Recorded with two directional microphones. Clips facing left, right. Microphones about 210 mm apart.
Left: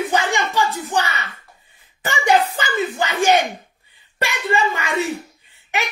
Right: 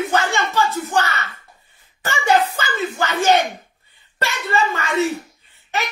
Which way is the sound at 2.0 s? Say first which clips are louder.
Even; 15° left (ahead or behind).